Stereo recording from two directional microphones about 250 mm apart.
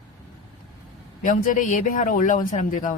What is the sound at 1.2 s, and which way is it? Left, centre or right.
Speech, left.